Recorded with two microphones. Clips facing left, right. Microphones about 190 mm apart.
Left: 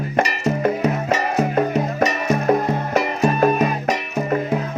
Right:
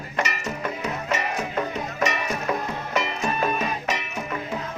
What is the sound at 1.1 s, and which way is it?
Music, 45° left (ahead or behind).